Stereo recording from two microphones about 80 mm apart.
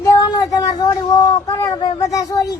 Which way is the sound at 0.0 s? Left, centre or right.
Left.